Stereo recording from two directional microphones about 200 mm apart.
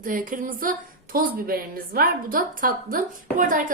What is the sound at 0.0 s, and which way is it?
A woman's voice, 45° right (ahead or behind).